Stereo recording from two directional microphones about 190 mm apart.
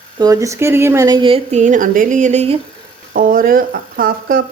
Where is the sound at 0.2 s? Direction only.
15° right (ahead or behind); by 2.6 s 35° right (ahead or behind).